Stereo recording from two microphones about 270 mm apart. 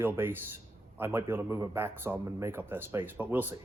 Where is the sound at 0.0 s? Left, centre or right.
Centre.